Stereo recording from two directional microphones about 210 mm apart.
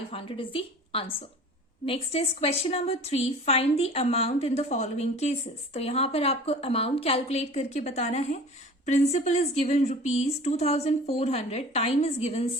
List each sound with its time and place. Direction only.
0.1 s a woman's voice: 25° left (ahead or behind)